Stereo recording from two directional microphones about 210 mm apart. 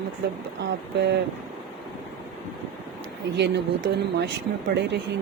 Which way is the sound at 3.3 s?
55° right (ahead or behind).